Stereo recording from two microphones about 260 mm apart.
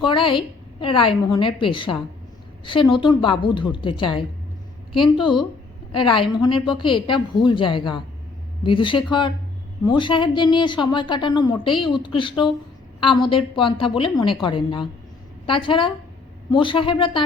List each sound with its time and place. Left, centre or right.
0.0 s a woman's voice: centre